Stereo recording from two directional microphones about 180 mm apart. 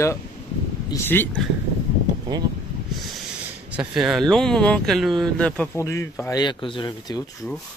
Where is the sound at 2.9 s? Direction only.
Centre (ahead or behind).